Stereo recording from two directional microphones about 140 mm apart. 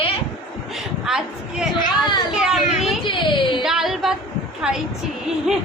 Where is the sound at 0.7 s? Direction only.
5° right (ahead or behind).